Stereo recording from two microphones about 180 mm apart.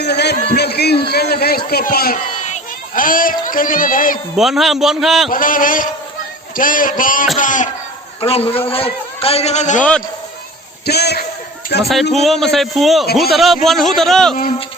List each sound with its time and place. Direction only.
0.0 s a sound: 65° left (ahead or behind)
0.5 s a man's voice: 65° left (ahead or behind)
4.4 s a man's voice: centre (ahead or behind)
5.3 s speech: 50° left (ahead or behind)
8.2 s a man's voice: 35° left (ahead or behind)
10.8 s a man's voice: 65° left (ahead or behind)
12.2 s a man's voice: centre (ahead or behind)